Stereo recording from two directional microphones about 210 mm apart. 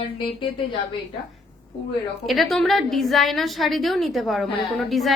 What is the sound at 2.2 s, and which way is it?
A woman's voice, centre (ahead or behind).